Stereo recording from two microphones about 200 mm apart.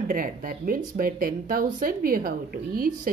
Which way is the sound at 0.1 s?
45° right (ahead or behind).